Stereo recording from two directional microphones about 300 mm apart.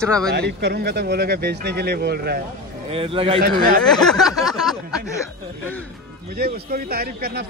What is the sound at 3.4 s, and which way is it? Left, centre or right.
Speech, right.